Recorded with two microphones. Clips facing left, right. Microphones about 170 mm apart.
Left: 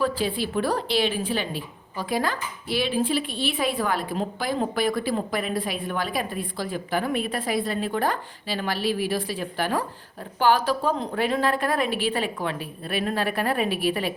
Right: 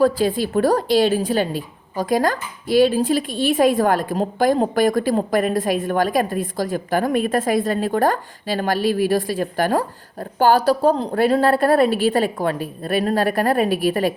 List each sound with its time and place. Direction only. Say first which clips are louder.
0.0 s a woman's voice: right 8 dB; 45° right (ahead or behind)